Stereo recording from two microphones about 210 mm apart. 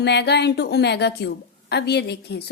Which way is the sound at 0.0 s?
55° left (ahead or behind).